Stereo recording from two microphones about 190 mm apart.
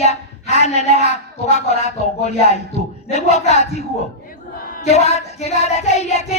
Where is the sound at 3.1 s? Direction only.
35° left (ahead or behind).